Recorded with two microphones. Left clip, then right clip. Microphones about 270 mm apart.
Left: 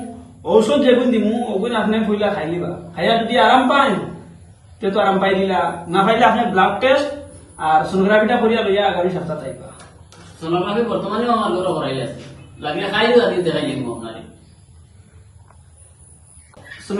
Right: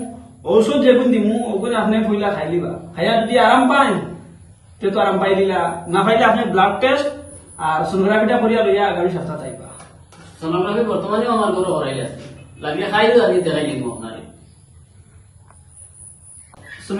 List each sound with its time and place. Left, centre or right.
0.4 s a man's voice: centre
10.2 s a man's voice: centre